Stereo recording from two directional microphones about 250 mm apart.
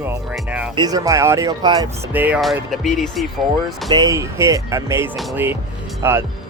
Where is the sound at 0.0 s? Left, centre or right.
Centre.